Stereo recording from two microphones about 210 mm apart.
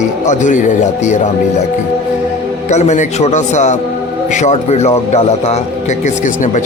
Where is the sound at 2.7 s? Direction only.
35° left (ahead or behind).